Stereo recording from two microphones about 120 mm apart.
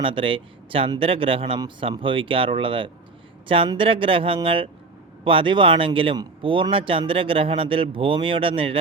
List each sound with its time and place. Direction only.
0.0 s speech: 45° right (ahead or behind)